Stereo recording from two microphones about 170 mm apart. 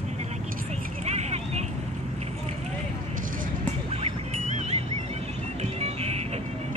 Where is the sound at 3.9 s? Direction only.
35° right (ahead or behind).